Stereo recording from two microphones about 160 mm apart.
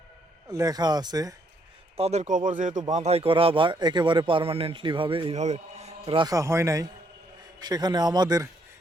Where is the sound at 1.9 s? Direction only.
40° right (ahead or behind).